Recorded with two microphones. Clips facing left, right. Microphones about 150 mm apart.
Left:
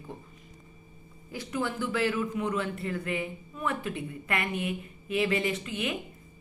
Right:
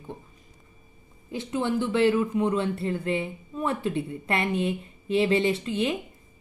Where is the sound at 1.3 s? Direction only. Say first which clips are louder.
Right 5 dB; 25° right (ahead or behind).